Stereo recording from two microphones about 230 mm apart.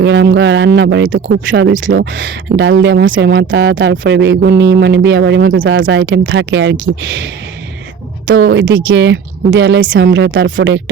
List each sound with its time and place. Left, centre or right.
0.0 s speech: right
8.4 s speech: right